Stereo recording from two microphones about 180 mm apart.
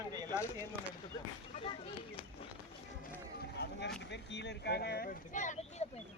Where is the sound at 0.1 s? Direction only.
20° right (ahead or behind).